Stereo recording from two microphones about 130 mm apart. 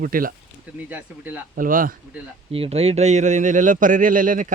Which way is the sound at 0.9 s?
15° right (ahead or behind).